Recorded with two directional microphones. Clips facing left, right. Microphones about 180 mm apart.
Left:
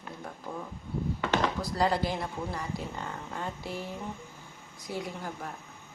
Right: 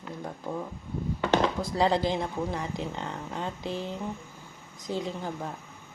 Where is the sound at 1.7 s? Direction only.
20° right (ahead or behind).